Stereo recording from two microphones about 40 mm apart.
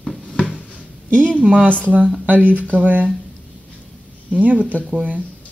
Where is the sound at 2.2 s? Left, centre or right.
Right.